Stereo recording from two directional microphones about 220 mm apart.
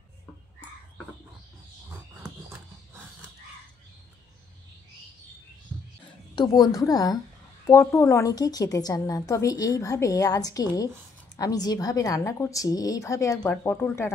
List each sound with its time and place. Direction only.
6.3 s a woman's voice: 20° left (ahead or behind)